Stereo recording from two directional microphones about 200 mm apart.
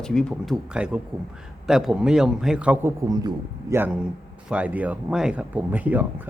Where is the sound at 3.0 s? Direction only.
20° right (ahead or behind).